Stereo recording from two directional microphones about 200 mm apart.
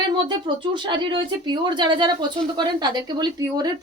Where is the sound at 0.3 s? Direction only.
25° right (ahead or behind).